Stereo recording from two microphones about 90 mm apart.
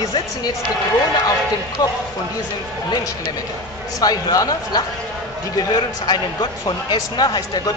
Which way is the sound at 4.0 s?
45° left (ahead or behind).